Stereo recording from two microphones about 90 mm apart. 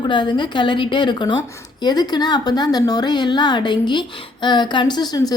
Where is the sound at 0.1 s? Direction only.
60° left (ahead or behind).